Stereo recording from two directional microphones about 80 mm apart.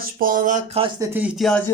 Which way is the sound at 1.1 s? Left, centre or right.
Centre.